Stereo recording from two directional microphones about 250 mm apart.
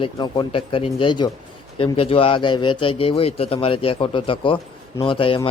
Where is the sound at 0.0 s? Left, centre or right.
Centre.